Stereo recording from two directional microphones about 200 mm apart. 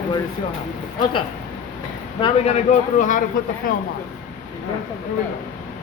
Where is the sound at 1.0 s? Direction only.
25° left (ahead or behind); by 3.8 s 45° left (ahead or behind).